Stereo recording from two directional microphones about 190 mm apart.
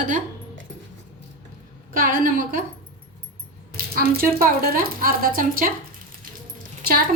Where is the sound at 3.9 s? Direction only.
50° right (ahead or behind).